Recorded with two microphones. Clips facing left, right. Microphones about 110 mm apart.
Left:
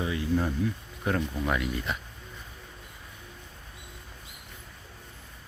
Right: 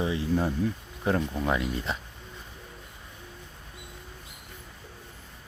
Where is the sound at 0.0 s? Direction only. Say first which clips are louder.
Right 1 dB; 25° right (ahead or behind).